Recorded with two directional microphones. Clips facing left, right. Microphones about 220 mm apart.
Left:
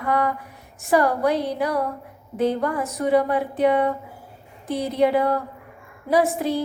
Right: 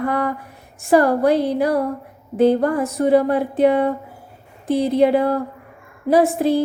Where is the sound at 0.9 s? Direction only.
45° right (ahead or behind).